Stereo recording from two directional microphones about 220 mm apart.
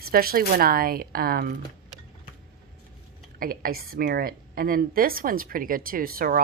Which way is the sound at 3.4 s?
40° right (ahead or behind).